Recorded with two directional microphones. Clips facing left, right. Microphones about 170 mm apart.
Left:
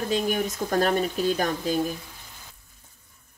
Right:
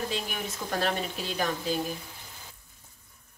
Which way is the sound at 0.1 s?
45° left (ahead or behind).